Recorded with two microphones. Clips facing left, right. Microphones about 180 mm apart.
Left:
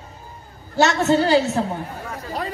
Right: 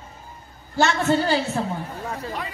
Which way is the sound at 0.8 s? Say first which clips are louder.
Left 3 dB; 40° left (ahead or behind).